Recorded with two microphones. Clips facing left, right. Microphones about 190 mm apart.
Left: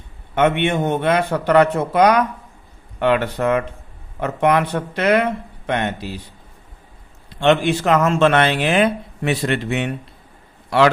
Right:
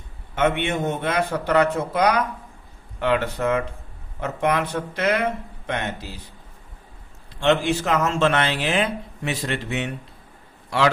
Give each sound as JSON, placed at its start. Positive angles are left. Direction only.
{"t": 0.3, "sound": "speech", "side_deg": 60}
{"t": 7.3, "sound": "a man's voice", "side_deg": 65}